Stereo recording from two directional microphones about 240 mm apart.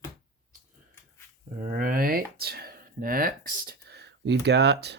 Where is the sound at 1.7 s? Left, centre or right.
Right.